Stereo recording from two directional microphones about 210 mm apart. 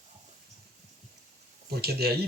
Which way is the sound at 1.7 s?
50° right (ahead or behind).